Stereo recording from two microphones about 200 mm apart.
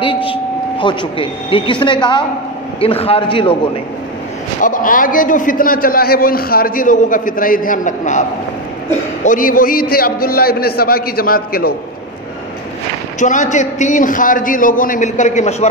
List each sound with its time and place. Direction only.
0.0 s a man's voice: 25° left (ahead or behind)
4.6 s a man's voice: 40° left (ahead or behind)
13.2 s a man's voice: 40° left (ahead or behind)